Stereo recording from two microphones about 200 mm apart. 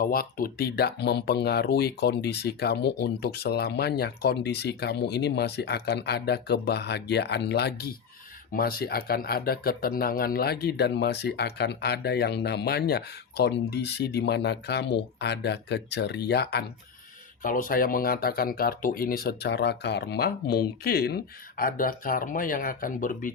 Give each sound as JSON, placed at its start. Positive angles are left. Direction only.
{"t": 0.0, "sound": "speech", "side_deg": 45}
{"t": 17.4, "sound": "speech", "side_deg": 45}